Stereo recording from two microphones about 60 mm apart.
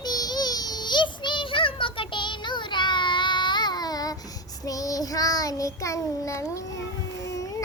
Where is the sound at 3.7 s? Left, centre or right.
Left.